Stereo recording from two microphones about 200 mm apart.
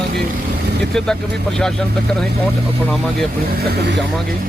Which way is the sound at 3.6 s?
55° right (ahead or behind).